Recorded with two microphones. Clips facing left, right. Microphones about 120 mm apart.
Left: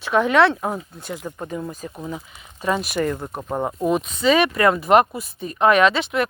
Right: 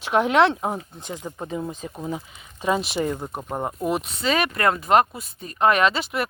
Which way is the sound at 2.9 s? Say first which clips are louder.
Left 2 dB; 15° right (ahead or behind).